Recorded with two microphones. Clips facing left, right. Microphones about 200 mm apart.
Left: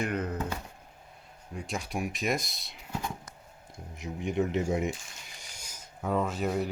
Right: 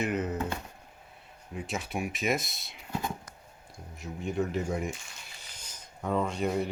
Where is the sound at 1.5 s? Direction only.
Centre (ahead or behind).